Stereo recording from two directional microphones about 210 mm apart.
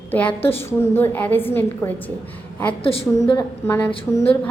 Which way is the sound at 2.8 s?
25° left (ahead or behind).